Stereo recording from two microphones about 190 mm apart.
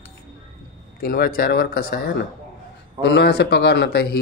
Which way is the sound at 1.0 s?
50° left (ahead or behind).